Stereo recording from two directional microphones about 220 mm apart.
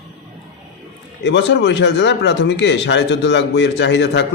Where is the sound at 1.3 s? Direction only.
55° left (ahead or behind).